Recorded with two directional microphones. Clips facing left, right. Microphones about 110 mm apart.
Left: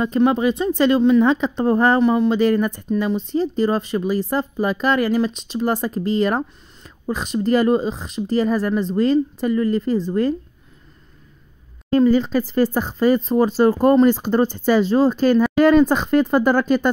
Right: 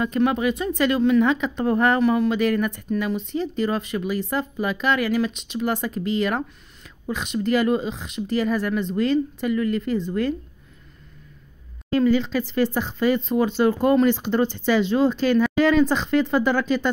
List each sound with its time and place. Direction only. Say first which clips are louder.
0.0 s a woman's voice: left 4 dB; 30° left (ahead or behind)
11.9 s a woman's voice: left 4 dB; 40° left (ahead or behind)